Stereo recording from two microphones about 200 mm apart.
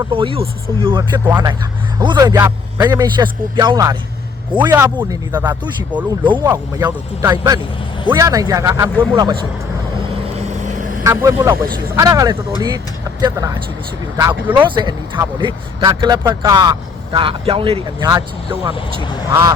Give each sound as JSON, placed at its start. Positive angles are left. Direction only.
{"t": 0.1, "sound": "speech", "side_deg": -25}
{"t": 11.0, "sound": "speech", "side_deg": -15}